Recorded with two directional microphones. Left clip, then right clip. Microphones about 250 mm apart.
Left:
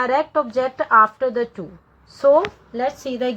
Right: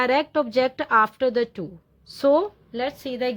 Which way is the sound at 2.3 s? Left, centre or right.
Right.